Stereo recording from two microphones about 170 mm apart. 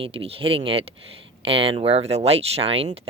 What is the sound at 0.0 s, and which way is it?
Speech, 35° right (ahead or behind).